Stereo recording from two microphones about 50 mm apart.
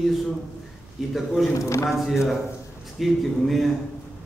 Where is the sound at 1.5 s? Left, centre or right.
Left.